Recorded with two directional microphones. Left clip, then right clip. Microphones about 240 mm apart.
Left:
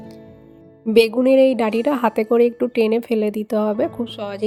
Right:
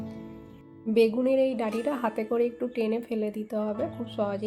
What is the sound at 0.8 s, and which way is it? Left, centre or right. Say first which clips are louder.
A woman's voice: left 9 dB; left.